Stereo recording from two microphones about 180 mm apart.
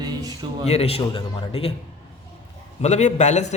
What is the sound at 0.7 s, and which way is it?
A man's voice, 35° left (ahead or behind).